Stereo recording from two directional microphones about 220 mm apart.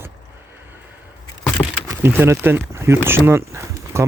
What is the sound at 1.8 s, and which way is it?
Speech, 10° right (ahead or behind).